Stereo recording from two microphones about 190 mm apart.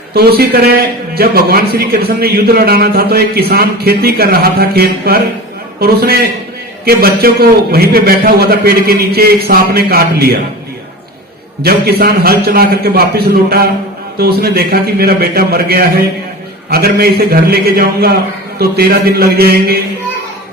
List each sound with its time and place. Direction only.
0.1 s a man's voice: 55° right (ahead or behind)
11.6 s a man's voice: 55° right (ahead or behind)